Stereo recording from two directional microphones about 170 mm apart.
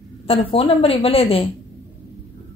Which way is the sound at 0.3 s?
35° left (ahead or behind).